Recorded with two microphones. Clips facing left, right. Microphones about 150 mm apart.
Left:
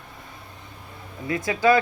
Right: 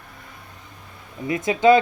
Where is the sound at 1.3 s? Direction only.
20° right (ahead or behind).